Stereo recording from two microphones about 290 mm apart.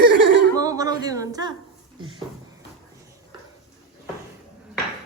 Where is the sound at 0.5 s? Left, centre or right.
Centre.